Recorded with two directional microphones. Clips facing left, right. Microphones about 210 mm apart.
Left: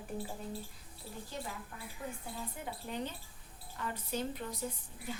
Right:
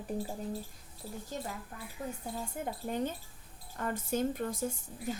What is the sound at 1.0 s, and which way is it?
A woman's voice, 40° right (ahead or behind).